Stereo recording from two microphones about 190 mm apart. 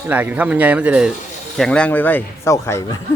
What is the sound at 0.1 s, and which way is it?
Speech, 10° right (ahead or behind).